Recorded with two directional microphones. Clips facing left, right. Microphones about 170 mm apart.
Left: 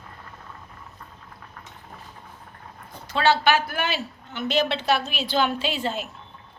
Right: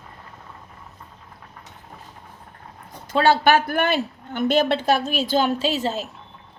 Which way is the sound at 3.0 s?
50° right (ahead or behind).